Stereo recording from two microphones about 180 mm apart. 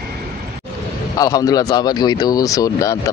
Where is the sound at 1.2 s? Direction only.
20° left (ahead or behind).